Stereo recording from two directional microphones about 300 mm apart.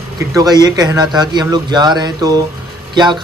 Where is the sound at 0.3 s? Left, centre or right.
Centre.